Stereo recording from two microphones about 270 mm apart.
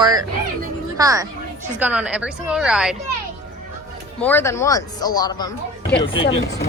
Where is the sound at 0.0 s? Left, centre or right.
Centre.